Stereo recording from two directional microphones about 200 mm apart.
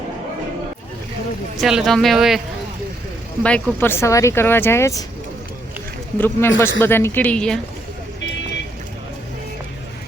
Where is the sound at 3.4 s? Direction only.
10° left (ahead or behind).